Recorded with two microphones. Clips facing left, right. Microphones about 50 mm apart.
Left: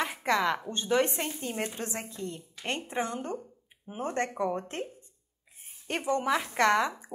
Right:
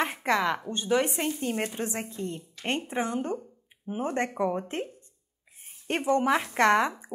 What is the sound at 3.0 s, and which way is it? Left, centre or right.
A woman's voice, centre.